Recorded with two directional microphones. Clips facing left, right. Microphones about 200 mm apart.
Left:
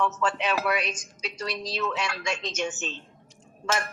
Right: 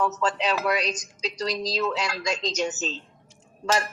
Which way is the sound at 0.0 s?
35° right (ahead or behind).